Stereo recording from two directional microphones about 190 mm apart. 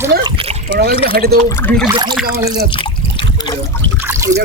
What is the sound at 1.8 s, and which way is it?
Speech, 25° right (ahead or behind).